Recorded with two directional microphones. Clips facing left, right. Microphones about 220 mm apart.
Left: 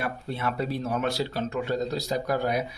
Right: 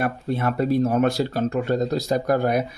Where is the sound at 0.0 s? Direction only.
50° right (ahead or behind).